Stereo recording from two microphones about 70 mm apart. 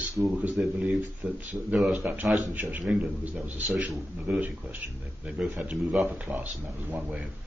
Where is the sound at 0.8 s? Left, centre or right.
Right.